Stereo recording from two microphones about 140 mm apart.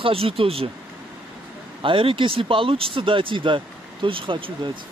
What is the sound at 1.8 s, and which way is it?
Speech, 40° right (ahead or behind).